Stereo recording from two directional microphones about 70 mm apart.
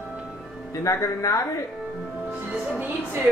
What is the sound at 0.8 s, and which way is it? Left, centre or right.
Speech, left.